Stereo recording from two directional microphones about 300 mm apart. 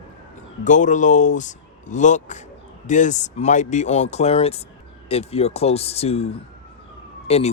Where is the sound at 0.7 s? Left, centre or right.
Left.